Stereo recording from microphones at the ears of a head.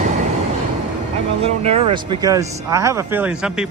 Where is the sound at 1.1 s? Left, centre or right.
Right.